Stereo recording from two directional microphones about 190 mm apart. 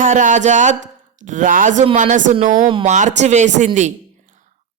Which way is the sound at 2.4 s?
45° right (ahead or behind).